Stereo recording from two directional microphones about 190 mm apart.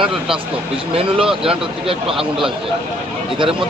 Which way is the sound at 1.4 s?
30° right (ahead or behind).